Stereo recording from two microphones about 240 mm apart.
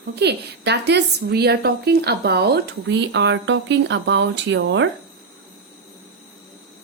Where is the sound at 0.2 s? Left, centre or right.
Right.